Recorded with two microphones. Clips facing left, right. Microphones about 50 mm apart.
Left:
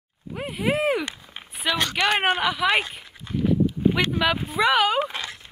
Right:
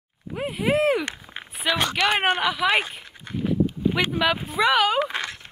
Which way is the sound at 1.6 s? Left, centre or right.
Centre.